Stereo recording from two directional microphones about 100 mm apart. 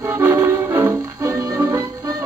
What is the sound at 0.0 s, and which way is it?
Music, 30° right (ahead or behind).